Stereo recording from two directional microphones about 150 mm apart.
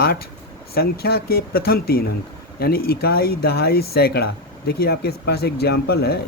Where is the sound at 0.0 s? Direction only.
90° left.